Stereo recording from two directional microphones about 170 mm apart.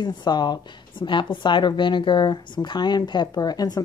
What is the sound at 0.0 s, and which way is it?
Speech, 25° left (ahead or behind).